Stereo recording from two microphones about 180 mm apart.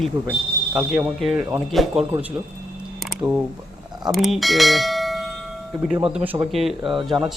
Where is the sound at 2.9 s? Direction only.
5° right (ahead or behind).